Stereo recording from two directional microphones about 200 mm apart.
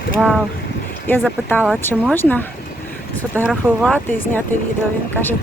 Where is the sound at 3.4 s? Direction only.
Centre (ahead or behind).